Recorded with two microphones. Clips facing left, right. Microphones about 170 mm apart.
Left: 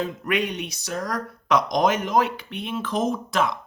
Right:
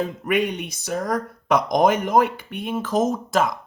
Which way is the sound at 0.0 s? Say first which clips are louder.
Right 3 dB; 50° right (ahead or behind).